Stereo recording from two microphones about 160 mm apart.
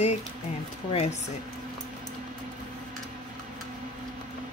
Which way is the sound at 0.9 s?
45° left (ahead or behind).